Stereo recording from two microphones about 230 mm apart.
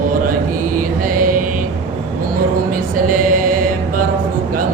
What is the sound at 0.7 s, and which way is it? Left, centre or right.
Mantra, right.